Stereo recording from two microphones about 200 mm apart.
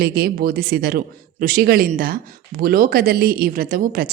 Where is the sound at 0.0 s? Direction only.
50° right (ahead or behind).